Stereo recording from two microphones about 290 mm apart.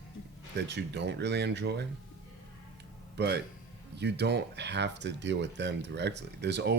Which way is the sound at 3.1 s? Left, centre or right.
Right.